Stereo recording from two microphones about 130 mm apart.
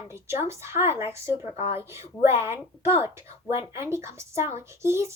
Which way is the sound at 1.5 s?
50° left (ahead or behind).